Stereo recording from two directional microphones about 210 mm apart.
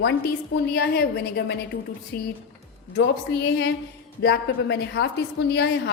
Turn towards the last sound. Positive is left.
turn(degrees=55)  # may be behind; listen again after turning